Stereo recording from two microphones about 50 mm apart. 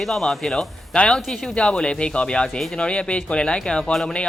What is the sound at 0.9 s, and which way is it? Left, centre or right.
Speech, centre.